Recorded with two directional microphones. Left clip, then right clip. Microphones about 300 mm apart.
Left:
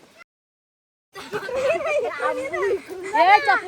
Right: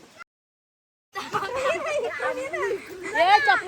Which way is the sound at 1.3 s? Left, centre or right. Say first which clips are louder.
Left 2 dB; centre.